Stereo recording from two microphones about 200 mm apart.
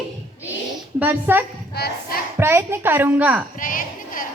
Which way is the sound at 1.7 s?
50° left (ahead or behind).